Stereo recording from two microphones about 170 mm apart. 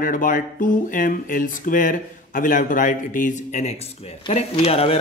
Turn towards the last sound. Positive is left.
turn(degrees=35)  # may be behind; listen again after turning